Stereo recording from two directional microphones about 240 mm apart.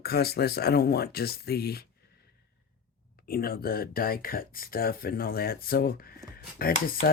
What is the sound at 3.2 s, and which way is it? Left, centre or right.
Speech, left.